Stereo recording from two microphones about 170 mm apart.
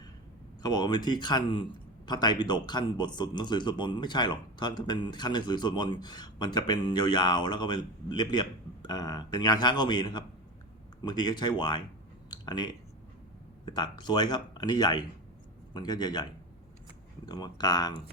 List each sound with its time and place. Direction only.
0.6 s a man's voice: 25° left (ahead or behind)
12.3 s a sound: 25° left (ahead or behind)
13.7 s a man's voice: 25° left (ahead or behind)